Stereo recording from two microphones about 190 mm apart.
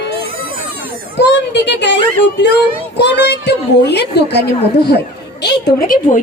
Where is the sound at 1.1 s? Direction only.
65° left (ahead or behind).